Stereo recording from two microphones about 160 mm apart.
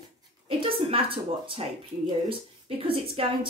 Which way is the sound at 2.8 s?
35° right (ahead or behind).